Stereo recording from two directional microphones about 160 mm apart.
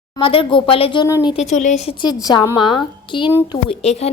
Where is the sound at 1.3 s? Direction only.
50° left (ahead or behind).